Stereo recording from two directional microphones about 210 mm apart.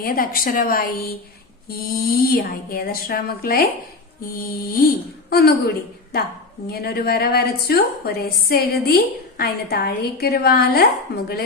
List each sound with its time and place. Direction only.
0.0 s a woman's voice: 45° left (ahead or behind)